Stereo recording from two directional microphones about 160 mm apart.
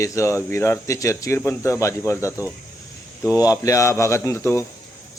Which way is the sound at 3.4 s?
20° left (ahead or behind).